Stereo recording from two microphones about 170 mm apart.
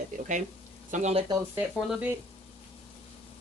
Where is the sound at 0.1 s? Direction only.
50° right (ahead or behind).